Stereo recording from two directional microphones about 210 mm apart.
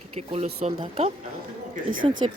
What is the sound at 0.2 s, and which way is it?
Speech, 30° right (ahead or behind).